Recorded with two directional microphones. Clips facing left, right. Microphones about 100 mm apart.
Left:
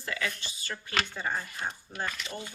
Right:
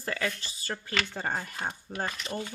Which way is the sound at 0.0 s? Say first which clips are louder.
Right 2 dB; 40° right (ahead or behind).